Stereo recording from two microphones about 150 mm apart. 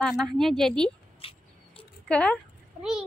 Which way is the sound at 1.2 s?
40° left (ahead or behind).